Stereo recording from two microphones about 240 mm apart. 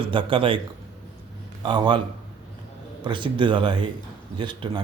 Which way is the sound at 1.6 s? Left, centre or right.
Centre.